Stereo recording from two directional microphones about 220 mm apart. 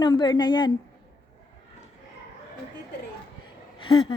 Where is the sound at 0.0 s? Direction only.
20° left (ahead or behind).